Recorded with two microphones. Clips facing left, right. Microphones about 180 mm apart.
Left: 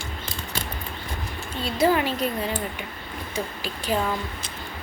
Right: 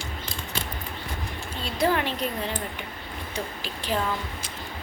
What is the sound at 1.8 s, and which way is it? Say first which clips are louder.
Speech: left 3 dB; 5° left (ahead or behind).